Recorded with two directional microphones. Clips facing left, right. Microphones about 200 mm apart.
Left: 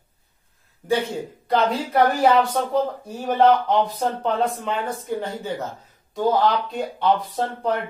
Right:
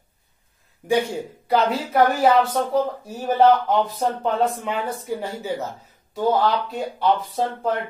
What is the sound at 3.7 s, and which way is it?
Speech, 5° right (ahead or behind).